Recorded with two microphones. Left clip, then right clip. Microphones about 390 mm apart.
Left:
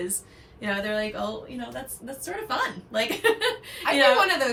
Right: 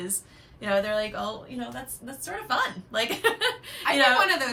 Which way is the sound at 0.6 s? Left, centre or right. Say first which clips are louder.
Right 2 dB; centre.